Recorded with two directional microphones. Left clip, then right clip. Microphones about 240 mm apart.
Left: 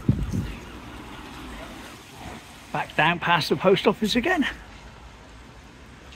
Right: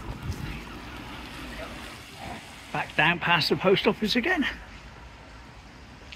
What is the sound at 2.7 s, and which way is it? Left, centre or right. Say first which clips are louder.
Speech: left 2 dB; centre.